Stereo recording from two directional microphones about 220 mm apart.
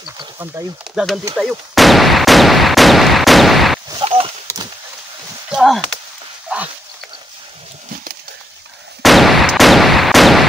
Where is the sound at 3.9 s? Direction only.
25° right (ahead or behind).